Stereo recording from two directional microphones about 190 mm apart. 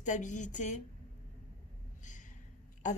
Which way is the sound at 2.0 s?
40° left (ahead or behind).